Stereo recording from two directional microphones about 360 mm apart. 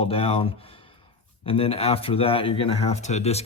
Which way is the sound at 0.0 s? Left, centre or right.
Centre.